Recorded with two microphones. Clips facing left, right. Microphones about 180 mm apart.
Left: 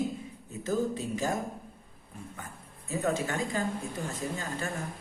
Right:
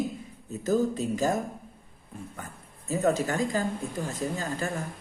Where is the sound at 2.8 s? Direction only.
40° right (ahead or behind).